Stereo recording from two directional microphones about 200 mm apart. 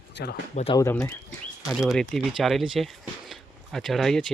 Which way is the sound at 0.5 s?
30° left (ahead or behind).